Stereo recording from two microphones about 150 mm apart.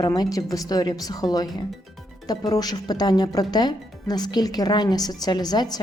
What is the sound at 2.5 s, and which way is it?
Speech, 25° left (ahead or behind).